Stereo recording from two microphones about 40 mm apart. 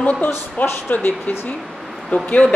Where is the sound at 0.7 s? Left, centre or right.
Left.